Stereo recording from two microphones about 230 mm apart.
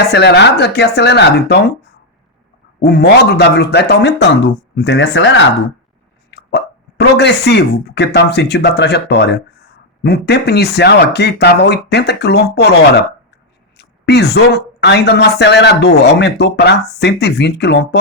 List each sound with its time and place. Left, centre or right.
0.1 s speech: left
2.8 s speech: left
13.7 s speech: left